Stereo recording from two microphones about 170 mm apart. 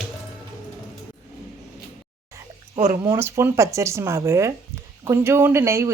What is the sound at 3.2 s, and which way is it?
Speech, 15° right (ahead or behind).